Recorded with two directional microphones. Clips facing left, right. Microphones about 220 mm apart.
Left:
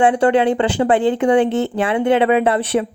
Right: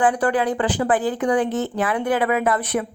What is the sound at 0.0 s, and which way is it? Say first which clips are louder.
Speech: left 6 dB; 25° left (ahead or behind).